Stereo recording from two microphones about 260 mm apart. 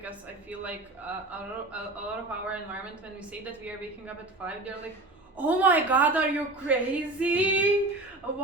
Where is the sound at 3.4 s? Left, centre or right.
Centre.